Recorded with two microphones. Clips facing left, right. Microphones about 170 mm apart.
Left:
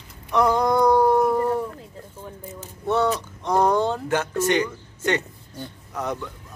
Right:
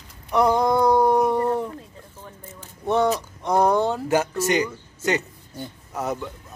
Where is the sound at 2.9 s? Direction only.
15° right (ahead or behind).